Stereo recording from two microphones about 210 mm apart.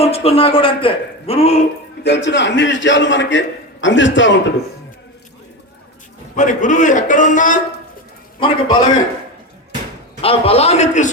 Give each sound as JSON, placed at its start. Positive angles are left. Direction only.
{"t": 0.0, "sound": "a man's voice", "side_deg": 30}
{"t": 2.0, "sound": "a man's voice", "side_deg": 55}
{"t": 6.3, "sound": "a man's voice", "side_deg": 35}
{"t": 8.4, "sound": "a man's voice", "side_deg": 25}
{"t": 10.2, "sound": "a man's voice", "side_deg": 25}